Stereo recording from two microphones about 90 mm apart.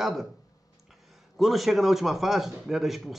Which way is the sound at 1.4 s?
Centre (ahead or behind).